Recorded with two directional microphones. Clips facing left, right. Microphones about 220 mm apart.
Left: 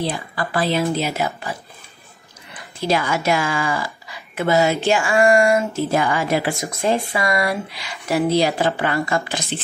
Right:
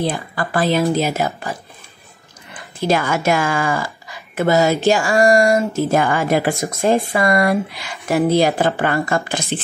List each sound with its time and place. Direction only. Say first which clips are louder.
0.0 s speech: right 3 dB; 50° right (ahead or behind)
2.8 s speech: right 3 dB; 50° right (ahead or behind)